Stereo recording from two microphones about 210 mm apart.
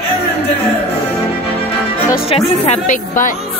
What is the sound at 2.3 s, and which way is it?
Speech, 35° left (ahead or behind).